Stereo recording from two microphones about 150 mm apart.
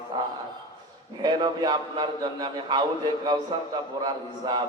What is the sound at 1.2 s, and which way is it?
A man's voice, 25° right (ahead or behind).